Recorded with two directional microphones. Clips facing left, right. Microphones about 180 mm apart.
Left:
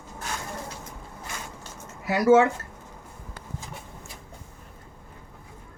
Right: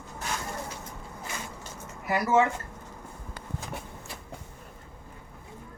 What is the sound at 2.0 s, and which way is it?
Speech, 80° left.